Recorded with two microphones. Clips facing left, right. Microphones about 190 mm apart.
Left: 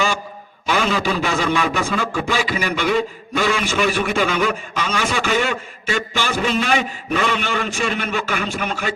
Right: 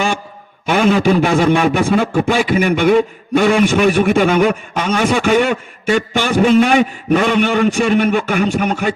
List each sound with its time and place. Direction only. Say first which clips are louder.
0.6 s a man's voice: right 7 dB; 55° right (ahead or behind)